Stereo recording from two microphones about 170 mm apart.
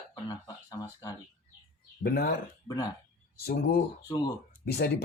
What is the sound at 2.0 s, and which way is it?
Speech, 65° left (ahead or behind).